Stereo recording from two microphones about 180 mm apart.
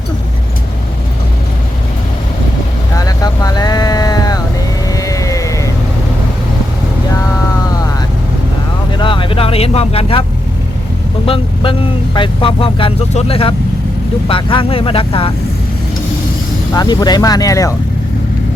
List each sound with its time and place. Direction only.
2.9 s vehicle: 20° left (ahead or behind)
4.9 s music: 20° left (ahead or behind)
9.0 s vehicle: 30° left (ahead or behind)
11.3 s speech: 30° left (ahead or behind)
16.7 s speech: 20° left (ahead or behind)